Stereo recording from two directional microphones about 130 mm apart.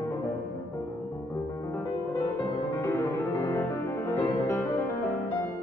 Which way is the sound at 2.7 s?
20° left (ahead or behind).